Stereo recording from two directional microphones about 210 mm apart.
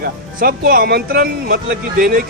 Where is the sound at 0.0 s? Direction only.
45° right (ahead or behind).